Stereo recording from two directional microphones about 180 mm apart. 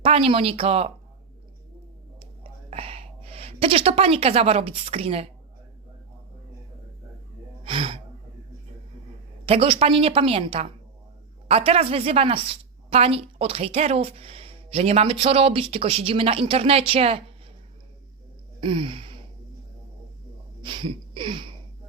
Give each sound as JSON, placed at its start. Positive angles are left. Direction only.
{"t": 0.0, "sound": "a woman's voice", "side_deg": -30}
{"t": 2.1, "sound": "whispering", "side_deg": -30}
{"t": 7.6, "sound": "gasp", "side_deg": -30}
{"t": 9.5, "sound": "a woman's voice", "side_deg": -30}
{"t": 18.6, "sound": "a sound", "side_deg": -30}
{"t": 20.6, "sound": "a sound", "side_deg": -25}